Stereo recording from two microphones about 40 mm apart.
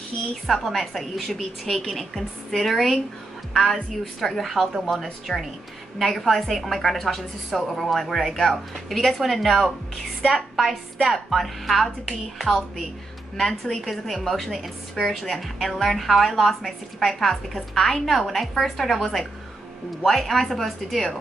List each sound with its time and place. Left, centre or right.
0.1 s a woman's voice: left
0.5 s a woman's voice: centre
1.3 s a woman's voice: centre